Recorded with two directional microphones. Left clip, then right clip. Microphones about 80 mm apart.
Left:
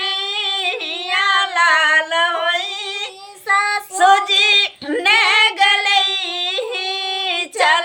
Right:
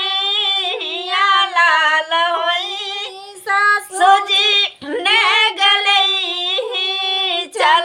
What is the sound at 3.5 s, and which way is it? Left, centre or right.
Child singing, right.